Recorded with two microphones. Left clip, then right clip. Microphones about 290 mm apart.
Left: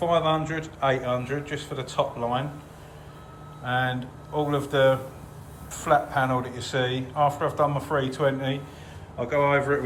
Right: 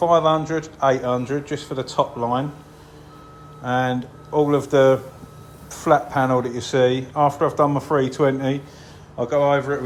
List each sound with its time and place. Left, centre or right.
0.1 s a man's voice: centre
3.6 s a man's voice: centre